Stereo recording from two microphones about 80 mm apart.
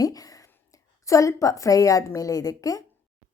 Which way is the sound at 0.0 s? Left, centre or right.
Left.